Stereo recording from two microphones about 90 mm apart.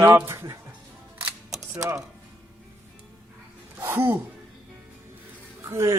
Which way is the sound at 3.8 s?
25° right (ahead or behind).